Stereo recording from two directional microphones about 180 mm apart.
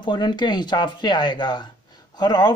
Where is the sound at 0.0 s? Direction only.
25° left (ahead or behind).